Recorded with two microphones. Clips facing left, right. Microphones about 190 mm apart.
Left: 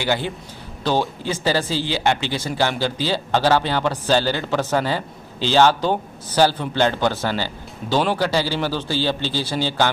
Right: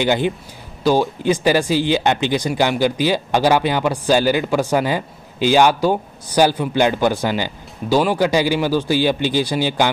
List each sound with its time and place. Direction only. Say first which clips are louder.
0.0 s speech: right 5 dB; 20° right (ahead or behind)